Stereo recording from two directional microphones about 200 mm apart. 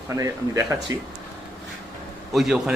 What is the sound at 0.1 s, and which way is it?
Speech, 15° right (ahead or behind).